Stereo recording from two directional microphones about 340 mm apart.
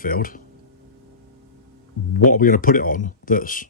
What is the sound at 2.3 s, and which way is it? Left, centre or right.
Speech, left.